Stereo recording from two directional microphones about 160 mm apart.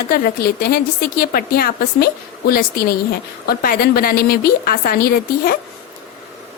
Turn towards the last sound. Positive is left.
turn(degrees=70)  # may be behind; listen again after turning